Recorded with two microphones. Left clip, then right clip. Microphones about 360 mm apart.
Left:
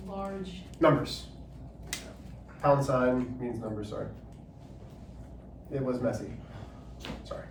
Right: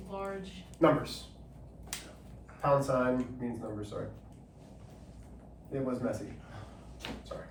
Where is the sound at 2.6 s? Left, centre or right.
Centre.